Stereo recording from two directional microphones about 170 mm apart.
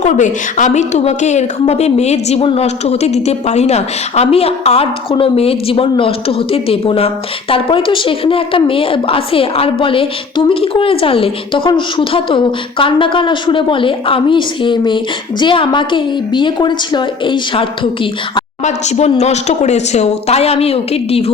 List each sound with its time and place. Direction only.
0.0 s a woman's voice: 45° left (ahead or behind); by 18.4 s 30° left (ahead or behind)
18.6 s a woman's voice: 40° left (ahead or behind)